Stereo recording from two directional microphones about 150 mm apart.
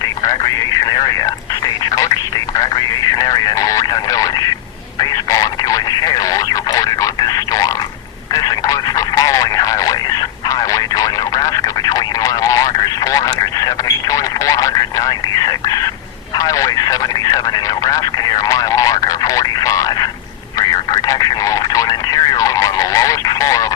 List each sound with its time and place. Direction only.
0.9 s speech: 25° left (ahead or behind)